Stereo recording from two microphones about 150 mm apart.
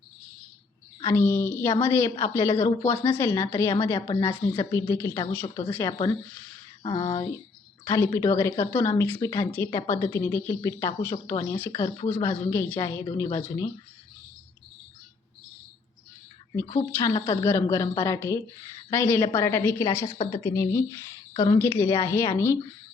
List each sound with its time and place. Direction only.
1.0 s a woman's voice: 15° left (ahead or behind)
4.5 s a woman's voice: 20° left (ahead or behind)
7.0 s a woman's voice: 20° left (ahead or behind)
17.0 s a woman's voice: 25° left (ahead or behind)